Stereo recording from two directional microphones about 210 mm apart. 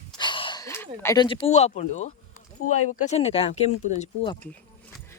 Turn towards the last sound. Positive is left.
turn(degrees=35)  # may be behind; listen again after turning